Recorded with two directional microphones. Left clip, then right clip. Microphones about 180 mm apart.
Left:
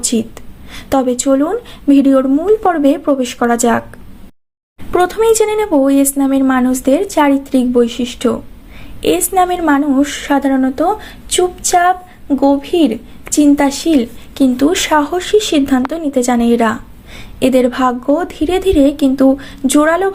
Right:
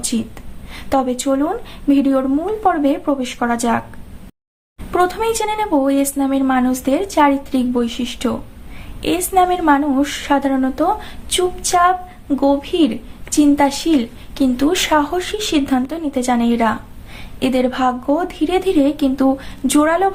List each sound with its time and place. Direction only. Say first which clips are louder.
0.7 s a woman's voice: left 4 dB; 25° left (ahead or behind)
4.9 s a woman's voice: left 5 dB; 20° left (ahead or behind)